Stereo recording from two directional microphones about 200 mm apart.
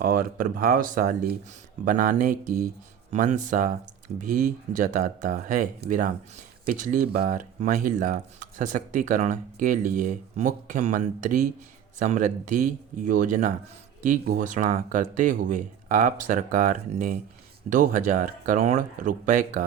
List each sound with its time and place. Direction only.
0.0 s speech: 45° right (ahead or behind)